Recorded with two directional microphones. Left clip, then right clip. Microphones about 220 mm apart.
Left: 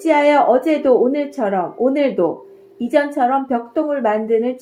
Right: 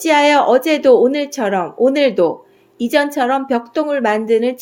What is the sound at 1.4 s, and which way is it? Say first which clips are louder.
Speech: right 3 dB; 40° right (ahead or behind).